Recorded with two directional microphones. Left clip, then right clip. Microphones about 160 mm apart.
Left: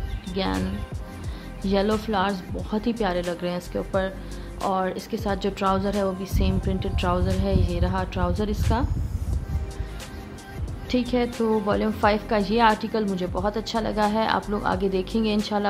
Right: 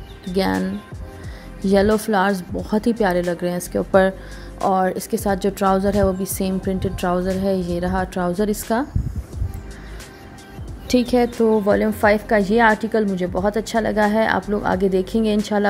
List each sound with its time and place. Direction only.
0.3 s speech: 40° right (ahead or behind)
1.7 s a woman's voice: 35° right (ahead or behind)
10.9 s a woman's voice: 40° right (ahead or behind)
11.4 s a woman's voice: 25° right (ahead or behind)